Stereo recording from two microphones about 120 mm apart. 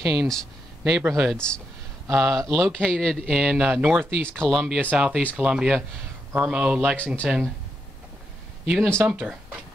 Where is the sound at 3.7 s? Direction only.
15° right (ahead or behind).